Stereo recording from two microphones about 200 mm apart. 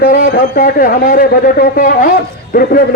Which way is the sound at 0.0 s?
50° left (ahead or behind).